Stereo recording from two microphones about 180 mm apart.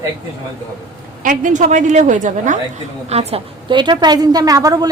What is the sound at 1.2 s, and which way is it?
A woman's voice, 45° right (ahead or behind).